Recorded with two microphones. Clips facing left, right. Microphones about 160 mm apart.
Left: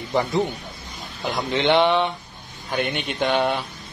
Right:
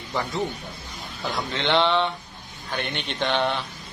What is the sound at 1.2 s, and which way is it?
Speech, 15° left (ahead or behind).